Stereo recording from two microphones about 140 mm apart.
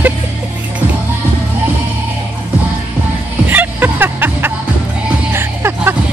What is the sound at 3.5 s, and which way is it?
Music, 15° right (ahead or behind).